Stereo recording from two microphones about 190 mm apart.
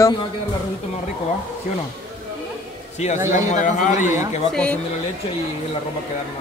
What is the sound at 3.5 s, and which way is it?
Speech, 40° left (ahead or behind).